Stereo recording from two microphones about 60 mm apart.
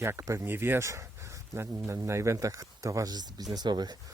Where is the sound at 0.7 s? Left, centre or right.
Right.